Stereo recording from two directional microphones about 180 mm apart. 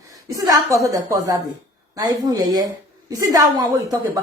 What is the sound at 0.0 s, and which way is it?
A woman's voice, 20° right (ahead or behind).